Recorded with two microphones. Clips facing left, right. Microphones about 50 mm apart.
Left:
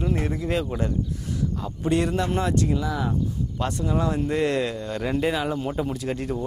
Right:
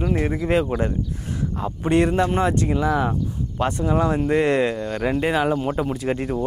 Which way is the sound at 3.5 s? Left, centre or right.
Right.